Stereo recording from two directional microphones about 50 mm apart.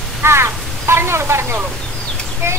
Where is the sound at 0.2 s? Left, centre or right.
Right.